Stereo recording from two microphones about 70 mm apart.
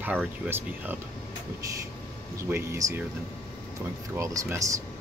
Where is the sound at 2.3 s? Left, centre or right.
Right.